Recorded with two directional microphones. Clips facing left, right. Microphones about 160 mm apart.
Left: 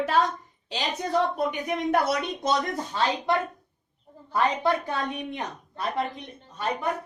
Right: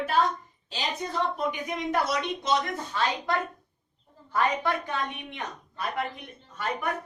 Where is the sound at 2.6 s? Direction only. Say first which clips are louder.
Left 2 dB; 40° left (ahead or behind).